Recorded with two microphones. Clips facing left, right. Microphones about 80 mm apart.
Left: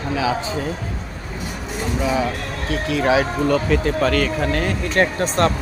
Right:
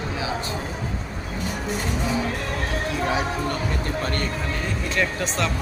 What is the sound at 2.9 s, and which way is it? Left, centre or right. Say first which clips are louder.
Speech: left 9 dB; left.